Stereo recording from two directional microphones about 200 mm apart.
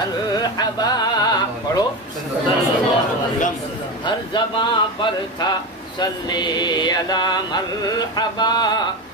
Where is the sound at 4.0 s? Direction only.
25° left (ahead or behind).